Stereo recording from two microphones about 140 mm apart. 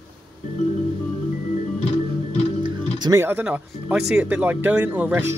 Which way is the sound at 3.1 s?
15° right (ahead or behind).